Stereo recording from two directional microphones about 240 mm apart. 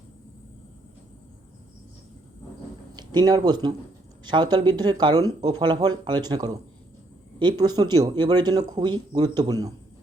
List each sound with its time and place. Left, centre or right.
2.9 s speech: centre